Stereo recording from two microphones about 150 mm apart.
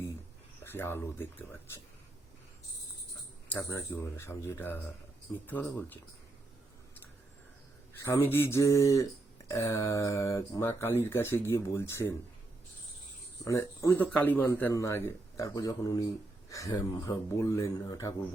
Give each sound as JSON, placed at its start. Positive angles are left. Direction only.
{"t": 0.6, "sound": "speech", "side_deg": 15}
{"t": 3.7, "sound": "speech", "side_deg": 20}
{"t": 8.0, "sound": "speech", "side_deg": 15}
{"t": 13.4, "sound": "speech", "side_deg": 20}